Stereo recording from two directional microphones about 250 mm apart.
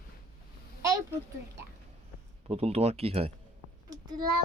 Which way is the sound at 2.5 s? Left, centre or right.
Right.